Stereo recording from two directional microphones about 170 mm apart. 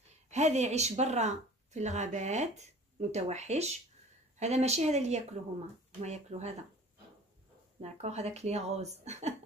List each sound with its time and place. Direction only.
0.3 s speech: 40° right (ahead or behind)
7.8 s speech: 40° right (ahead or behind)